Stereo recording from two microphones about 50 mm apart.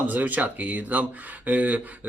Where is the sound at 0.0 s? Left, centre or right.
Right.